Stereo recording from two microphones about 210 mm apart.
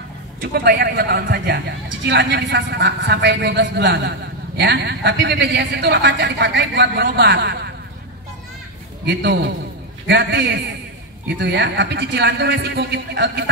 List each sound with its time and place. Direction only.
0.4 s a man's voice: 45° right (ahead or behind)
9.0 s a man's voice: 55° right (ahead or behind)